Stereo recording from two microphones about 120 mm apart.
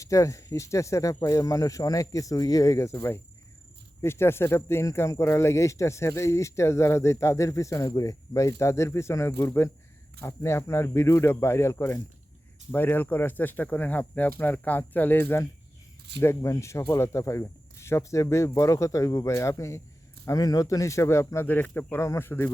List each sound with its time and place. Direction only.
0.0 s speech: 25° left (ahead or behind)